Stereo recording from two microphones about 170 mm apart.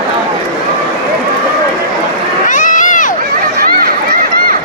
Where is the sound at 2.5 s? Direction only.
50° left (ahead or behind).